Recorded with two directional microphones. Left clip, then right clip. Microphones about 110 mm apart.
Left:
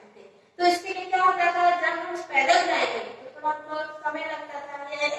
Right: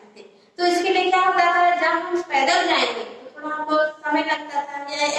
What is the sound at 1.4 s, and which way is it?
A woman's voice, 30° right (ahead or behind).